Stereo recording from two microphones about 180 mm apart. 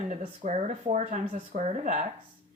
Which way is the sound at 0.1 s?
40° right (ahead or behind).